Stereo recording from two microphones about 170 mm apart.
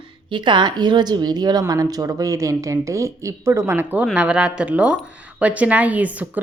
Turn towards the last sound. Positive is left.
turn(degrees=-10)  # may be behind; listen again after turning